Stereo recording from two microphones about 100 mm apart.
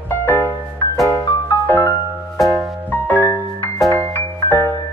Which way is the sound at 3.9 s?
30° left (ahead or behind).